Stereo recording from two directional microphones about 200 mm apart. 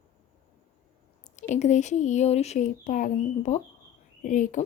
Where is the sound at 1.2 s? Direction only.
35° left (ahead or behind).